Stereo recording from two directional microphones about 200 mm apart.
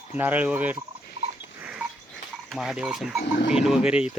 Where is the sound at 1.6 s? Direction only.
5° right (ahead or behind).